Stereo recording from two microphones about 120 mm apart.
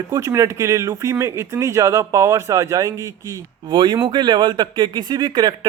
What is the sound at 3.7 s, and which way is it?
Speech, 40° right (ahead or behind).